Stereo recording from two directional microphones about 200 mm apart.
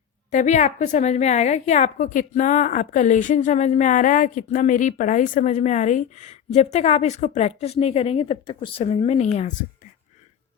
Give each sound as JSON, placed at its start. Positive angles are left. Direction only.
{"t": 0.3, "sound": "a woman's voice", "side_deg": 35}